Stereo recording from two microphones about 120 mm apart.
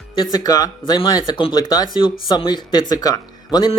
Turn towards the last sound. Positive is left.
turn(degrees=30)  # may be behind; listen again after turning